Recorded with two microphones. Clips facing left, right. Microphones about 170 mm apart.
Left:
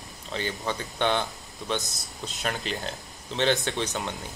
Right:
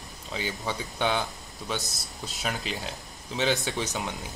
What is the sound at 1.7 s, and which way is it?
Speech, 20° left (ahead or behind).